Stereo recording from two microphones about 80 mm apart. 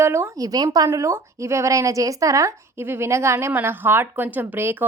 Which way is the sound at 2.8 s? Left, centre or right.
Right.